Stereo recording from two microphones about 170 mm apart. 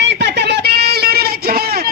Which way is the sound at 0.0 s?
90° right.